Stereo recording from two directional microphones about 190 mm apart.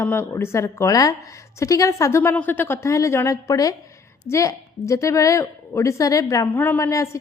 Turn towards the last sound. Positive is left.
turn(degrees=15)  # may be behind; listen again after turning